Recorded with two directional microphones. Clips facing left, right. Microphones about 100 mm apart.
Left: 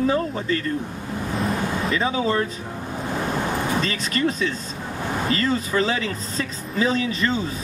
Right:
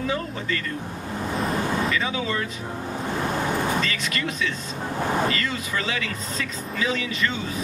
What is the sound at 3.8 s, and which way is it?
Speech, 35° left (ahead or behind).